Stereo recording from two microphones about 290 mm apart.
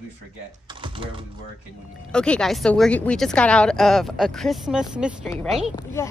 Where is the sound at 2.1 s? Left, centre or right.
Centre.